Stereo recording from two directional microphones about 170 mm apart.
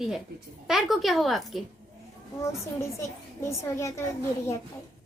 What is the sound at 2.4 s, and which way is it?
A child's voice, 15° left (ahead or behind).